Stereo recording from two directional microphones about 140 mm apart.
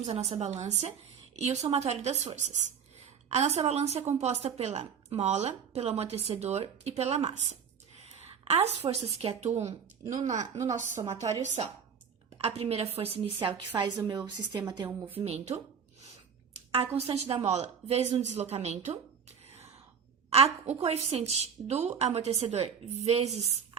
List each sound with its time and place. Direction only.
0.0 s a woman's voice: 50° right (ahead or behind); by 14.6 s 30° right (ahead or behind)
14.8 s speech: 15° right (ahead or behind)
15.2 s a woman's voice: 50° right (ahead or behind)
16.7 s a woman's voice: 40° right (ahead or behind)
20.3 s a woman's voice: 45° right (ahead or behind)